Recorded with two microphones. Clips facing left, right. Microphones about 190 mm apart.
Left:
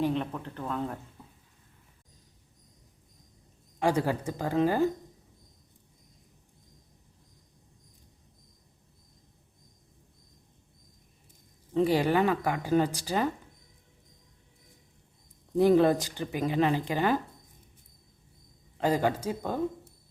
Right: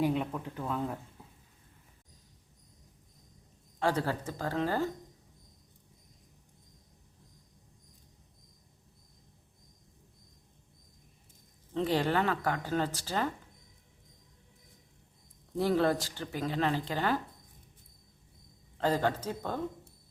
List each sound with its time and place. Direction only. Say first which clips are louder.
0.0 s speech: left 1 dB; 10° right (ahead or behind)
3.8 s speech: left 4 dB; 15° left (ahead or behind)
11.7 s speech: left 5 dB; 10° left (ahead or behind)
15.5 s speech: left 6 dB; 15° left (ahead or behind)
18.8 s speech: left 3 dB; 10° left (ahead or behind)